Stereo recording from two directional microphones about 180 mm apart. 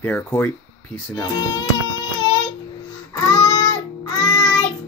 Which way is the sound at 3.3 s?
20° left (ahead or behind).